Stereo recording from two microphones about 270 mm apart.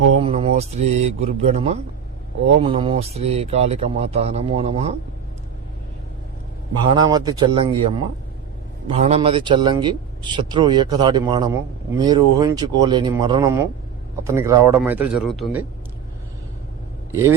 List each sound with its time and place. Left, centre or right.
0.2 s a man's voice: right
6.9 s a man's voice: centre